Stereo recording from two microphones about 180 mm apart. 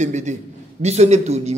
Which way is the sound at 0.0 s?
40° right (ahead or behind).